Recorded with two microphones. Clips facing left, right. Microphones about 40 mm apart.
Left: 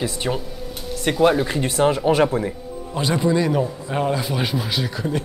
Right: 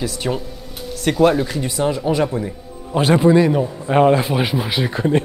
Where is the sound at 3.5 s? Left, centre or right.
Centre.